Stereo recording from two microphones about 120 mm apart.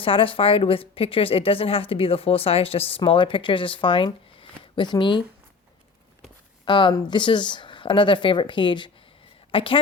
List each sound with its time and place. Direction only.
0.0 s a woman's voice: 50° left (ahead or behind)
6.7 s a woman's voice: 40° left (ahead or behind)